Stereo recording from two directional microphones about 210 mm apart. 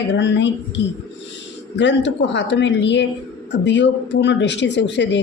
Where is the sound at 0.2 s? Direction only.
60° left (ahead or behind).